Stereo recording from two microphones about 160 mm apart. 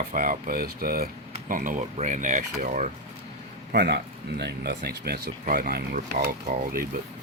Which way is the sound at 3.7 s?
90° right.